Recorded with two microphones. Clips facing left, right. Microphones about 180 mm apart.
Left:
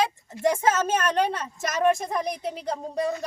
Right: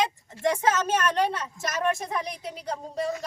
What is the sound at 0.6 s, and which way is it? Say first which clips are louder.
Speech: left 1 dB; 50° left (ahead or behind).